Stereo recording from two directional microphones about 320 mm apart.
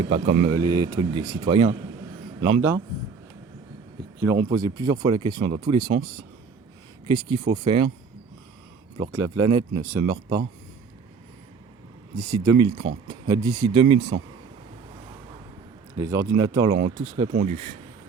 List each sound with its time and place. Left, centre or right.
0.1 s speech: centre
4.2 s speech: centre
7.1 s speech: centre
9.0 s speech: centre
12.1 s speech: centre
16.0 s speech: centre
16.7 s speech: right